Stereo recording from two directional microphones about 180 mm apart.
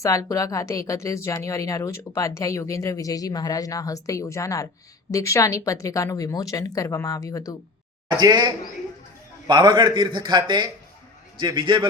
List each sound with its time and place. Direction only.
0.0 s speech: 20° left (ahead or behind)
8.1 s a man's voice: 25° right (ahead or behind)